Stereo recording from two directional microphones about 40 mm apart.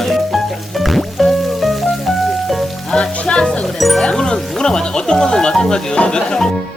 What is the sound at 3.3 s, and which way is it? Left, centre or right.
Music, left.